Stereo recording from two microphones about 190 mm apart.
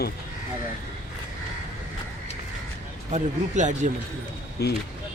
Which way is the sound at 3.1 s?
40° right (ahead or behind).